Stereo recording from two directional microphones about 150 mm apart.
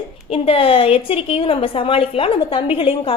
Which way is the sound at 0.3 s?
40° left (ahead or behind).